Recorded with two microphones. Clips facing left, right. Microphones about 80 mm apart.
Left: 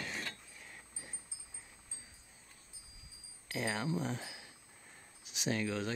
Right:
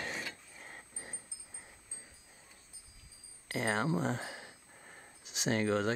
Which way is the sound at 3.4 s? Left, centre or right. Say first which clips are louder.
Right 4 dB; right.